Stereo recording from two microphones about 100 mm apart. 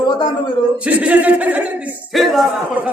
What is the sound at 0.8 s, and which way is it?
Speech, 15° right (ahead or behind).